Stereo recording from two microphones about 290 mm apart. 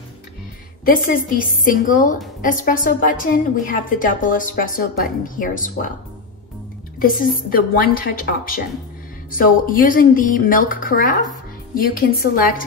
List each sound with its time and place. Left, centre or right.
0.8 s a woman's voice: left
7.0 s a woman's voice: left